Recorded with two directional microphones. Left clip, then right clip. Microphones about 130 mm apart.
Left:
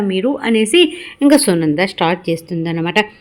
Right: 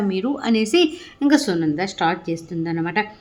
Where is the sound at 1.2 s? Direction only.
35° left (ahead or behind).